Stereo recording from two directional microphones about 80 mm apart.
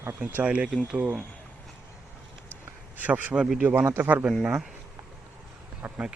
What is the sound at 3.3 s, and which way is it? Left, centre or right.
Speech, centre.